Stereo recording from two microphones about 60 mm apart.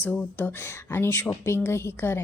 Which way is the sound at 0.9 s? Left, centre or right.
Left.